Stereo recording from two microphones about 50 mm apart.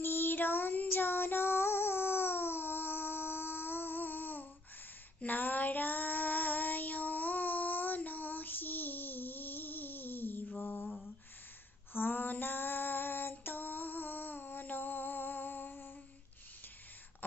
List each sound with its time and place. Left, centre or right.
0.0 s child singing: left
10.6 s mantra: left
11.9 s female singing: left